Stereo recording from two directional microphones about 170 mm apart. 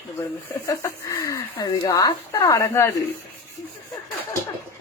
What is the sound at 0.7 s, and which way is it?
Speech, 20° left (ahead or behind).